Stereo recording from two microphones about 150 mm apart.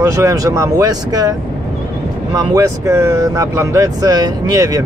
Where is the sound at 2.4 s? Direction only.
20° right (ahead or behind).